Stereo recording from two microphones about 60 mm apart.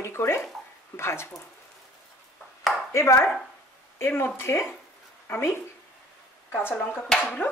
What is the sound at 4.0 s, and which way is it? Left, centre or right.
Speech, left.